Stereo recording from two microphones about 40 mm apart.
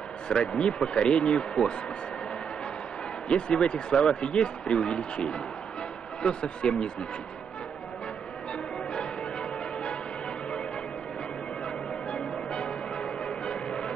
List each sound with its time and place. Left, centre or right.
0.3 s speech: left
3.3 s speech: left
8.9 s change ringing: left
11.6 s music: left